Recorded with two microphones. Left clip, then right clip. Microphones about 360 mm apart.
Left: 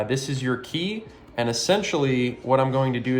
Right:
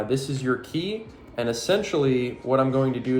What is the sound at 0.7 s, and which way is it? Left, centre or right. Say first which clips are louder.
Speech: even; centre.